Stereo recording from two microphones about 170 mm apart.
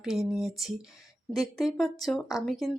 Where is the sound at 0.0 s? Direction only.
Centre (ahead or behind).